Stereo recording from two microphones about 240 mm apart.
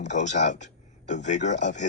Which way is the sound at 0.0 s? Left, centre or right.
Left.